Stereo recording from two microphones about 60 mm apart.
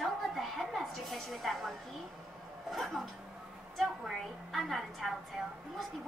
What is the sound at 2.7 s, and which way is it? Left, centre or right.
Speech, centre.